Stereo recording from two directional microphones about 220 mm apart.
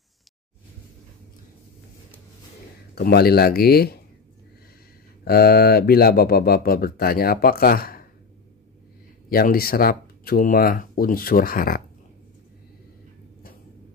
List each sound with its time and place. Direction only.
2.9 s speech: 45° left (ahead or behind)
5.2 s speech: 45° left (ahead or behind)
9.3 s speech: 40° left (ahead or behind)